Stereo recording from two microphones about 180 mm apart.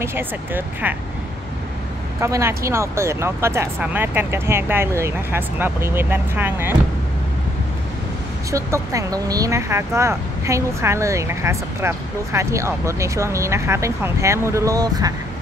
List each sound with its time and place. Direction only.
0.0 s speech: 10° right (ahead or behind)
2.1 s speech: 15° right (ahead or behind)
8.5 s speech: 15° right (ahead or behind)